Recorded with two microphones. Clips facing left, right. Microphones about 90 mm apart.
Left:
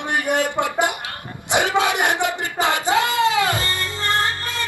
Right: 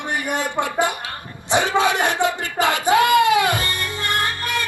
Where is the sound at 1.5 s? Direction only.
20° left (ahead or behind).